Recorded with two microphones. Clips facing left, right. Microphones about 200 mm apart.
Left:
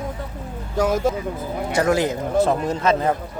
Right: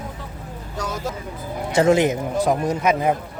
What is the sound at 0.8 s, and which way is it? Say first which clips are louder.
Speech: left 9 dB; 50° left (ahead or behind).